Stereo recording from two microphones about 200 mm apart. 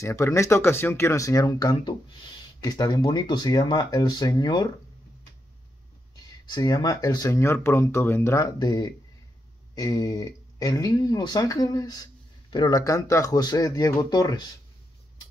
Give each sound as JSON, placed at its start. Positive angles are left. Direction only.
{"t": 0.0, "sound": "speech", "side_deg": 15}
{"t": 6.4, "sound": "speech", "side_deg": 20}